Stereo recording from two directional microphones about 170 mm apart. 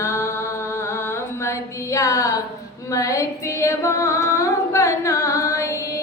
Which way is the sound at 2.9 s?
20° left (ahead or behind).